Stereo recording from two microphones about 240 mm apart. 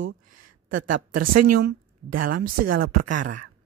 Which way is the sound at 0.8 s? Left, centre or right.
Right.